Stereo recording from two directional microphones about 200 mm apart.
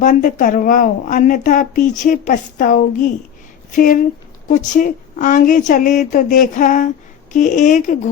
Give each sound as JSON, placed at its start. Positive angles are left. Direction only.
{"t": 0.0, "sound": "speech", "side_deg": 40}
{"t": 4.4, "sound": "speech", "side_deg": 40}